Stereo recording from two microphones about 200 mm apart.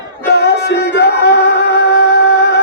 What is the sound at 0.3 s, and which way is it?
Music, 55° left (ahead or behind).